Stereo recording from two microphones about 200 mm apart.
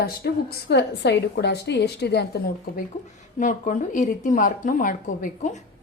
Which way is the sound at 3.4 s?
40° left (ahead or behind).